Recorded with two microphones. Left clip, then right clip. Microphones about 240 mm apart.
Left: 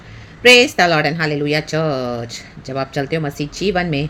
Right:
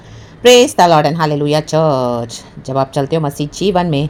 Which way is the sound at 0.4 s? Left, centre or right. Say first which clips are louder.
Right 3 dB; centre.